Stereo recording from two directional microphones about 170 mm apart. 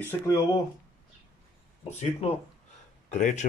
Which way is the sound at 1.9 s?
40° left (ahead or behind).